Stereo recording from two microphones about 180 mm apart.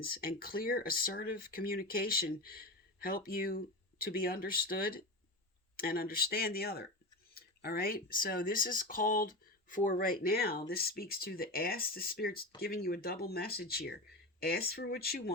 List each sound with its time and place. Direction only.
0.0 s speech: 55° left (ahead or behind)